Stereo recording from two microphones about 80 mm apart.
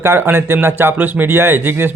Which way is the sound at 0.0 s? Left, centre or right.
Right.